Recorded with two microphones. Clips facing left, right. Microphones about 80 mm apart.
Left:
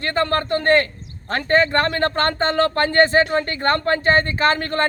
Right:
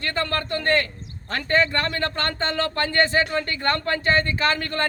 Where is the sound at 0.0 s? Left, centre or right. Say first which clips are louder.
Left 5 dB; left.